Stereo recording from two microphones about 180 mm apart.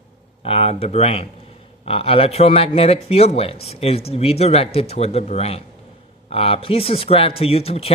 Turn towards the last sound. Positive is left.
turn(degrees=35)  # may be behind; listen again after turning